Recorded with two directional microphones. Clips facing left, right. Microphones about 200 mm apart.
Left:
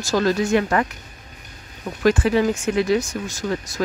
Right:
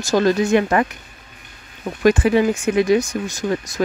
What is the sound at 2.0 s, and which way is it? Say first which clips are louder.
Speech: right 3 dB; 15° right (ahead or behind).